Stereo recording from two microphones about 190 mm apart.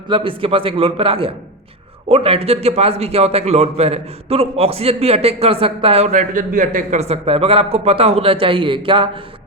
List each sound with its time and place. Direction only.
0.1 s a man's voice: 30° right (ahead or behind)